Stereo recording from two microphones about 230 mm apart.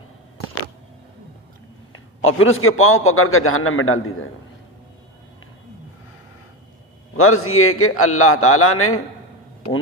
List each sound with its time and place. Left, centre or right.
1.9 s a man's voice: left
7.2 s a man's voice: left